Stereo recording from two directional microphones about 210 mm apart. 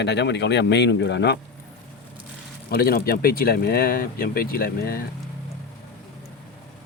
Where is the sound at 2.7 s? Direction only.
45° left (ahead or behind).